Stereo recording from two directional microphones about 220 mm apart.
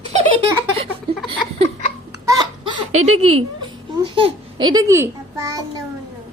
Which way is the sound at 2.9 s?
80° right.